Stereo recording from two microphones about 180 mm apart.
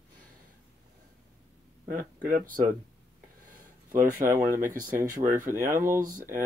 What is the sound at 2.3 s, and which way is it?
Speech, 50° right (ahead or behind).